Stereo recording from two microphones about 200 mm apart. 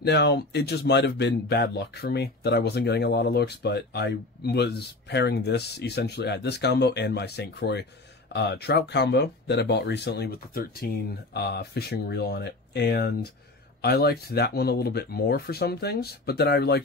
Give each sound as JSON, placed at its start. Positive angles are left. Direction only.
{"t": 0.0, "sound": "speech", "side_deg": 55}